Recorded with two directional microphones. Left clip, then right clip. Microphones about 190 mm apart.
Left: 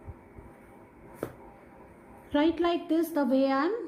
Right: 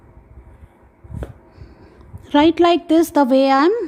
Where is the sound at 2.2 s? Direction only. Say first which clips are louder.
Right 13 dB; 45° right (ahead or behind).